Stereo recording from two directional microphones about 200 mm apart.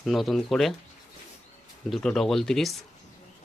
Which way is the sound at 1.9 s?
Centre (ahead or behind).